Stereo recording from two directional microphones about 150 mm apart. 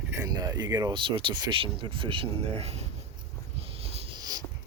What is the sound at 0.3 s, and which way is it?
Speech, 25° right (ahead or behind).